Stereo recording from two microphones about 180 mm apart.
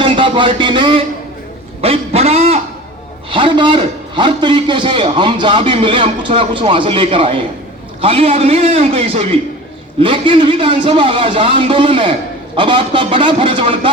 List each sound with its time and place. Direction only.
0.0 s a man's voice: 30° right (ahead or behind)